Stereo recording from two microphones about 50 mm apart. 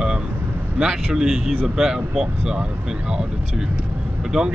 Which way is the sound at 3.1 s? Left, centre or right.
Centre.